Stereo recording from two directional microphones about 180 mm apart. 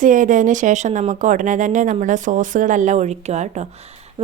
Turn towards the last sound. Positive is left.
turn(degrees=-35)  # may be behind; listen again after turning